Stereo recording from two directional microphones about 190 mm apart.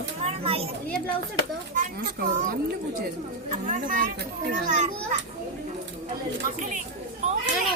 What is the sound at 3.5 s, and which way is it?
A child's voice, 40° right (ahead or behind).